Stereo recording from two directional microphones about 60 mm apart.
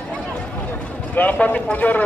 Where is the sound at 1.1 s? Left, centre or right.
Left.